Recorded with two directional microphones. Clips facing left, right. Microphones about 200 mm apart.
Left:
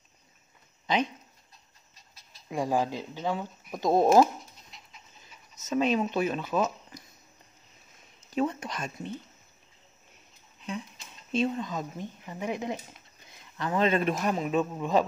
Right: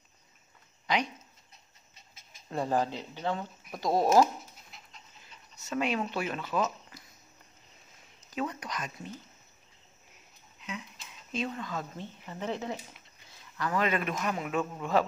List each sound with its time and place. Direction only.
0.9 s speech: 20° left (ahead or behind)
1.5 s pant: 20° right (ahead or behind)
2.5 s speech: 10° left (ahead or behind)
4.2 s dog: centre (ahead or behind)
5.6 s speech: 20° left (ahead or behind)
8.3 s speech: 25° left (ahead or behind)
11.3 s speech: 25° left (ahead or behind)